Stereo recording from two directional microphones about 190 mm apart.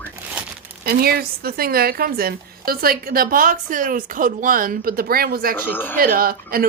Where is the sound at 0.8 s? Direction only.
55° right (ahead or behind).